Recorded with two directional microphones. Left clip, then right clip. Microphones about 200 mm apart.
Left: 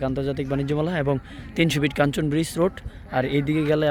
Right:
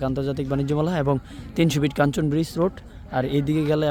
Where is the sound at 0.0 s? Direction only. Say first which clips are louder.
Even; 15° right (ahead or behind).